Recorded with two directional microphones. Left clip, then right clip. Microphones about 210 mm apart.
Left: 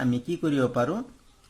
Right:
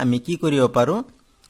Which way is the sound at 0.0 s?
40° right (ahead or behind).